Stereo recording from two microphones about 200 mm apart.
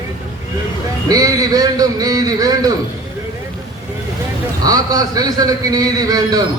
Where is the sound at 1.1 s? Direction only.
20° right (ahead or behind).